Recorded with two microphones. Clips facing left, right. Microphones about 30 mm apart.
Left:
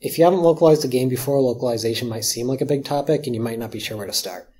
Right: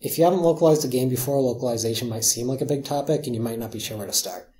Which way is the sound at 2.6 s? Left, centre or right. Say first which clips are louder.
Left 4 dB; left.